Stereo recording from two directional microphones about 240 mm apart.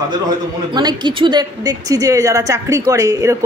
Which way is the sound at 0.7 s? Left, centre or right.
Centre.